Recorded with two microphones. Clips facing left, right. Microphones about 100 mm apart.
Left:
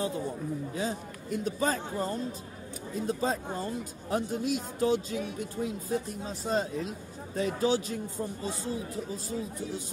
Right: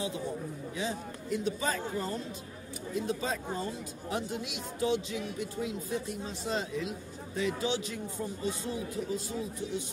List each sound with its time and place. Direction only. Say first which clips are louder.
0.7 s speech: left 2 dB; 40° left (ahead or behind)
3.1 s speech: left 6 dB; 40° left (ahead or behind)